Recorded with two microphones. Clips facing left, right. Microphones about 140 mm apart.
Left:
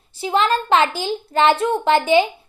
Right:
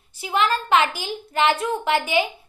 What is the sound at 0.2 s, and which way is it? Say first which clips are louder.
Speech: left 4 dB; 30° left (ahead or behind).